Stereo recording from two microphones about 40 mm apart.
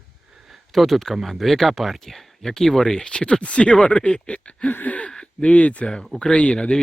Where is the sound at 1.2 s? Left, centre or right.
Centre.